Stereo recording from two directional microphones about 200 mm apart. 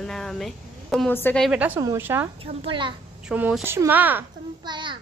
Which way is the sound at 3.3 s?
10° right (ahead or behind).